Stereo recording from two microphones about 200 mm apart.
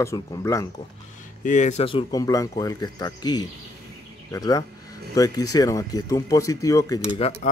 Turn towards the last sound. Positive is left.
turn(degrees=15)  # may be behind; listen again after turning